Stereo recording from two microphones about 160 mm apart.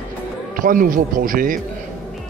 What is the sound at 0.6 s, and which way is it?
Speech, 60° right (ahead or behind).